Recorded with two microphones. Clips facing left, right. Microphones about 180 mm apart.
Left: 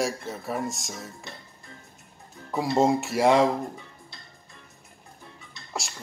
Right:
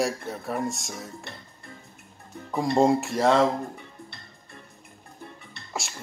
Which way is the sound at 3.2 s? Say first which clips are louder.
Left 1 dB; 15° left (ahead or behind).